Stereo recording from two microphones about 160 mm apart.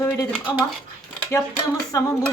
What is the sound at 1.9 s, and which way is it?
Speech, 20° left (ahead or behind).